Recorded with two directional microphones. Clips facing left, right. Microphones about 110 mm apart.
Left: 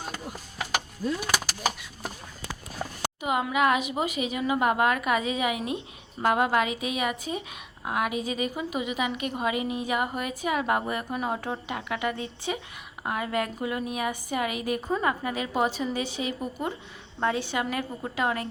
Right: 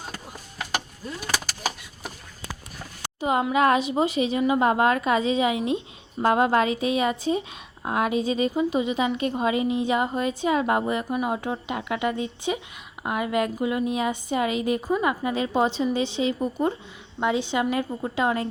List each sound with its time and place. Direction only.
3.2 s a woman's voice: 30° right (ahead or behind)